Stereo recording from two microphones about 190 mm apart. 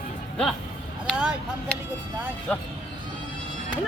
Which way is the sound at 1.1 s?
5° right (ahead or behind).